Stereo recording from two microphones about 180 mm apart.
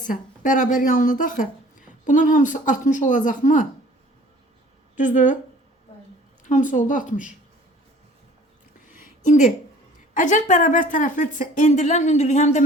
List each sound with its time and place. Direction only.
0.0 s a woman's voice: 50° left (ahead or behind)
4.9 s a woman's voice: 45° left (ahead or behind)
6.4 s a woman's voice: 45° left (ahead or behind)
9.0 s a sound: 45° left (ahead or behind)
10.2 s a woman's voice: 45° left (ahead or behind)